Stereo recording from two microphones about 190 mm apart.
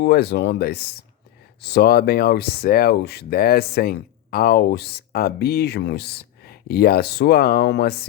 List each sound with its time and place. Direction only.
0.0 s speech: 60° left (ahead or behind)